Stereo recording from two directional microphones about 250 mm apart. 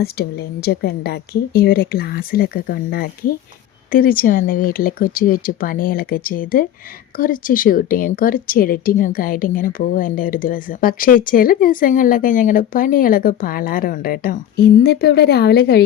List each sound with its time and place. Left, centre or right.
0.0 s speech: left